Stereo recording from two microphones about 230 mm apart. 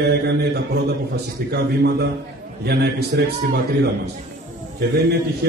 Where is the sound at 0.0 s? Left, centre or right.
Right.